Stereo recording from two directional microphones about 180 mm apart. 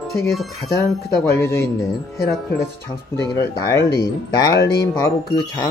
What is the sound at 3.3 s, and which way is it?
Speech, 15° left (ahead or behind).